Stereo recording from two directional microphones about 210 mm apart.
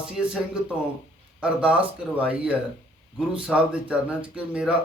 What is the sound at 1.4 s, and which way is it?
A man's voice, 5° right (ahead or behind).